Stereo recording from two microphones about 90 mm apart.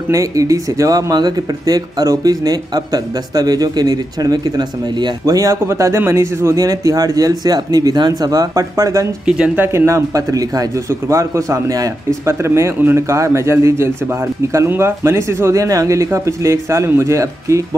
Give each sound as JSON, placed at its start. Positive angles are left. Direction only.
{"t": 0.1, "sound": "speech", "side_deg": -40}
{"t": 5.2, "sound": "a man's voice", "side_deg": -40}